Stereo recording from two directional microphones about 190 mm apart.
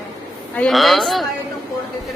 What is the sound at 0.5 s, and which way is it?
Speech, centre (ahead or behind).